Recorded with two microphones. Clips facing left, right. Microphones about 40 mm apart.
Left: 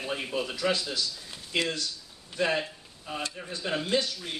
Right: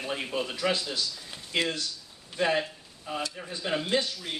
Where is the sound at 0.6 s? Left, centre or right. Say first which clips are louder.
Even; centre.